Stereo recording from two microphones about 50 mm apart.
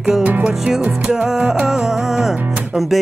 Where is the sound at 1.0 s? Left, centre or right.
Centre.